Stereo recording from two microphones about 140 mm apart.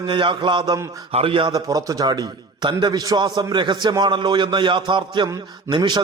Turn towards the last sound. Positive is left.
turn(degrees=-30)  # may be behind; listen again after turning